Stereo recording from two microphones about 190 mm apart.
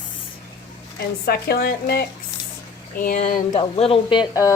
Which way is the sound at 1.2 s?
55° left (ahead or behind).